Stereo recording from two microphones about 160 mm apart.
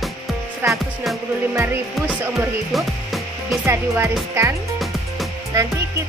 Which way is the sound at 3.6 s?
15° right (ahead or behind).